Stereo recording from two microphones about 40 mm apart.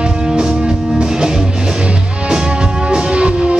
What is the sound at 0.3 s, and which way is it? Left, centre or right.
Music, centre.